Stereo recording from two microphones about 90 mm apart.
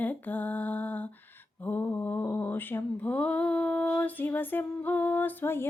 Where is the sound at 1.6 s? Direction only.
20° left (ahead or behind).